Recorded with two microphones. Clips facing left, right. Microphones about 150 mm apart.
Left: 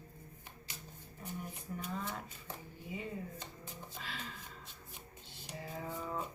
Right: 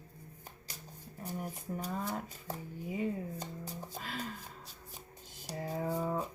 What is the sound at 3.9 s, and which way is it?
Music, 40° right (ahead or behind).